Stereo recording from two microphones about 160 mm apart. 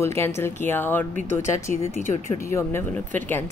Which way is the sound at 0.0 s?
15° left (ahead or behind).